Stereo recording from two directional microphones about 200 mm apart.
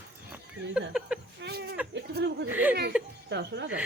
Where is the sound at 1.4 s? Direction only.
55° right (ahead or behind).